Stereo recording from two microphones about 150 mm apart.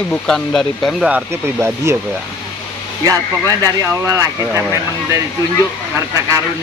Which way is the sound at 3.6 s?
20° right (ahead or behind).